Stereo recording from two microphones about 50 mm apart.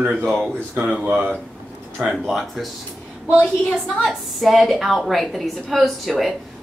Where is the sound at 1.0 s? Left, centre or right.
Right.